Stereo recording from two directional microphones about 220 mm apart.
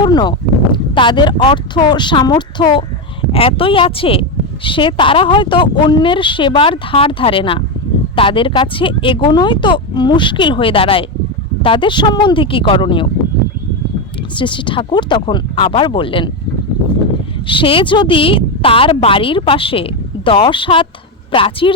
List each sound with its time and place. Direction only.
0.0 s speech: 20° left (ahead or behind)
14.3 s speech: 20° left (ahead or behind)
17.4 s speech: 25° left (ahead or behind)